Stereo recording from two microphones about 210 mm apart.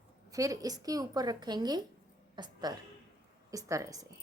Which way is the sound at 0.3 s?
15° right (ahead or behind).